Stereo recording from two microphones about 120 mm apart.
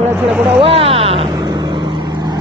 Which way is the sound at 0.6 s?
50° right (ahead or behind).